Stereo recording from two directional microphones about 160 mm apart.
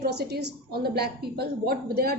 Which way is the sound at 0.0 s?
90° right.